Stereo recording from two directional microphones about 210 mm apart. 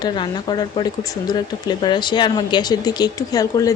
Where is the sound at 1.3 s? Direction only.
20° left (ahead or behind).